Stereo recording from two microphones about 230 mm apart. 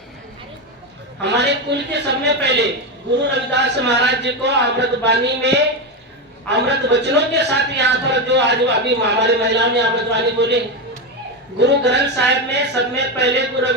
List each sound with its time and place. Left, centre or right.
1.2 s a man's voice: right
11.6 s a man's voice: right